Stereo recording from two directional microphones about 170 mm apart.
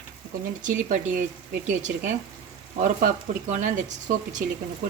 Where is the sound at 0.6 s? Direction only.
50° right (ahead or behind).